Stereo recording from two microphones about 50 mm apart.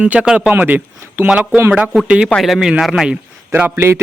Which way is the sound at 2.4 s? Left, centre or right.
Centre.